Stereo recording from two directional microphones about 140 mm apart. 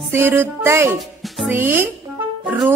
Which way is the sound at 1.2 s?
Centre (ahead or behind).